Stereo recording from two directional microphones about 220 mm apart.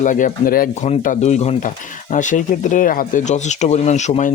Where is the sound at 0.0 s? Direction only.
35° left (ahead or behind).